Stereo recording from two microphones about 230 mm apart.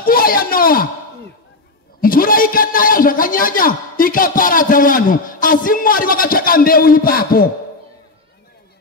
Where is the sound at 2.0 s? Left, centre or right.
Left.